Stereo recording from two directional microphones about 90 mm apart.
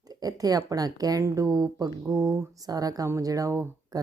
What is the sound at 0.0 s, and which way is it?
Speech, 45° right (ahead or behind).